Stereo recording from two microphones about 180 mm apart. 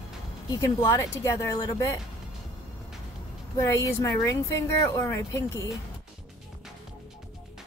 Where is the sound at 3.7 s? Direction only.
15° left (ahead or behind).